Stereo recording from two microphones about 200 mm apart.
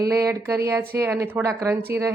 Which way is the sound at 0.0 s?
15° right (ahead or behind).